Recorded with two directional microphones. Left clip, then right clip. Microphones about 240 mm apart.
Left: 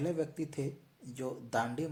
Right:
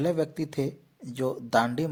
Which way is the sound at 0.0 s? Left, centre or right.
Right.